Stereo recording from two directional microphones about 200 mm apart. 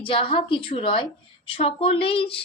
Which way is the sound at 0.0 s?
25° left (ahead or behind).